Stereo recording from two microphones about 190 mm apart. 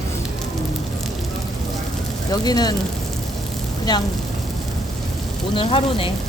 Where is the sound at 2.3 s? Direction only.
20° left (ahead or behind).